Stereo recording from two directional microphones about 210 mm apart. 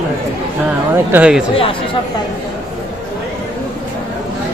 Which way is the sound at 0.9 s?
10° right (ahead or behind).